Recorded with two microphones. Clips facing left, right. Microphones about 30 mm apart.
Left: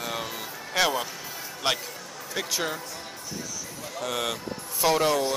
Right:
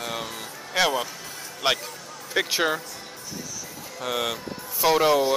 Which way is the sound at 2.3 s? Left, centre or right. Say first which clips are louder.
Right 6 dB; right.